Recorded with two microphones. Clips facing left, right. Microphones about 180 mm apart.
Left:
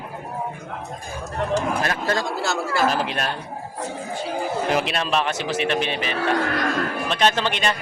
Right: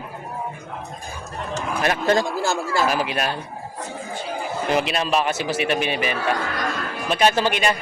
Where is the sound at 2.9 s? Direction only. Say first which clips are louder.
Right 1 dB; 10° right (ahead or behind).